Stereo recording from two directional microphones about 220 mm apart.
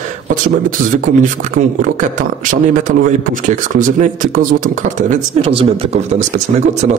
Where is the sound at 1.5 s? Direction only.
35° right (ahead or behind).